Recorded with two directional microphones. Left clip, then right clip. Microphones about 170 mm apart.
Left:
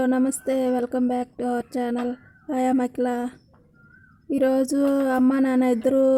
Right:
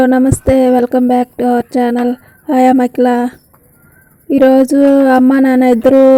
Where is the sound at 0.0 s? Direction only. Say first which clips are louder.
Right 12 dB; 25° right (ahead or behind).